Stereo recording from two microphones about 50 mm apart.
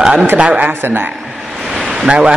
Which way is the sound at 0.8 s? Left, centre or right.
Right.